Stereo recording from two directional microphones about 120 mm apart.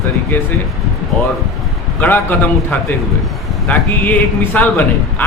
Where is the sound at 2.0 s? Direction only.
15° left (ahead or behind).